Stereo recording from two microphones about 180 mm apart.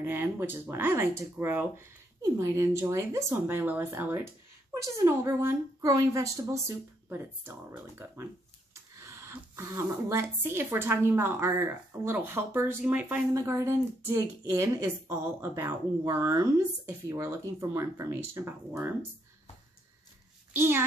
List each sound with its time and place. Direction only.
0.0 s speech: 10° right (ahead or behind)
20.5 s speech: 15° right (ahead or behind)